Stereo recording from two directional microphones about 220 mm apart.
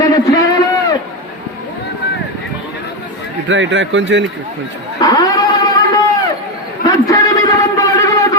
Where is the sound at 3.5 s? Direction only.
55° right (ahead or behind).